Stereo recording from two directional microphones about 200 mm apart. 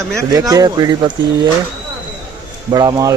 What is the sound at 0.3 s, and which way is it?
Speech, 15° right (ahead or behind).